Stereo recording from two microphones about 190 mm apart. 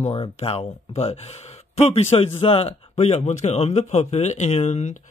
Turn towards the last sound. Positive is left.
turn(degrees=35)  # may be behind; listen again after turning